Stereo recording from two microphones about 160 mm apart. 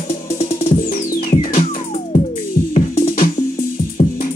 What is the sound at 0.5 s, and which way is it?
Music, 60° left (ahead or behind).